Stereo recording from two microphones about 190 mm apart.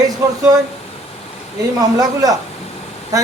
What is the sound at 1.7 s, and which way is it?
A man's voice, 20° right (ahead or behind).